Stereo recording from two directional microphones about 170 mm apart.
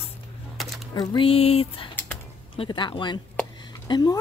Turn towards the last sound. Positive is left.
turn(degrees=20)  # may be behind; listen again after turning